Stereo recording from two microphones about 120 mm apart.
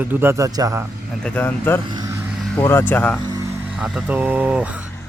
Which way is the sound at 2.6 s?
20° left (ahead or behind).